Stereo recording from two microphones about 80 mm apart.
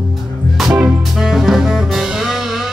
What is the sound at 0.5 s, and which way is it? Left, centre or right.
Music, centre.